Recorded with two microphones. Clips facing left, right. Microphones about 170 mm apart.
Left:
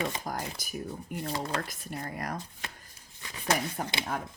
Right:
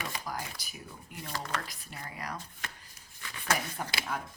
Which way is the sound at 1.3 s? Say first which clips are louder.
Left 4 dB; 30° left (ahead or behind).